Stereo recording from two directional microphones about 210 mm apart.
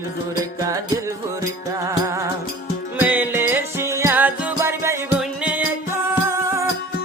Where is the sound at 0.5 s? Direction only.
15° right (ahead or behind).